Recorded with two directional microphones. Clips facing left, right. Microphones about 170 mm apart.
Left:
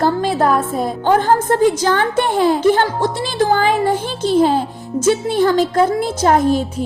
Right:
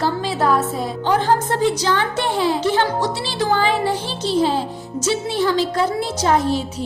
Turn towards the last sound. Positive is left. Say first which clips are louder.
# left 4 dB
turn(degrees=50)  # may be behind; listen again after turning